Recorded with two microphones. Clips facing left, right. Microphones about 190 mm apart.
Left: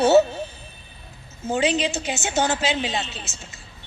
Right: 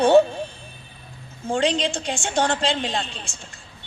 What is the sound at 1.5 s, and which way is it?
A woman's voice, 5° left (ahead or behind).